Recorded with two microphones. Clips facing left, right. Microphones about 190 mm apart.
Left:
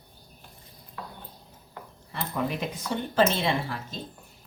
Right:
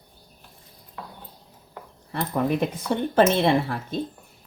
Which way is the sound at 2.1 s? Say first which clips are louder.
Right 6 dB; 55° right (ahead or behind).